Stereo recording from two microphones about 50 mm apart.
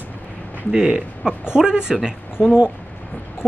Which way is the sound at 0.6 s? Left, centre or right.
Centre.